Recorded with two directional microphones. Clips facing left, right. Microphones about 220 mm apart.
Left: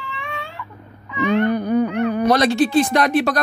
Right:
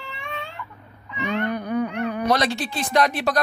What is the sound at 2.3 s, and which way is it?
Speech, 50° left (ahead or behind).